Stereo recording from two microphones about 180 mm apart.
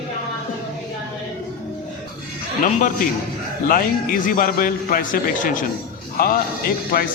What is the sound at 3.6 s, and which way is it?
A man's voice, 50° left (ahead or behind).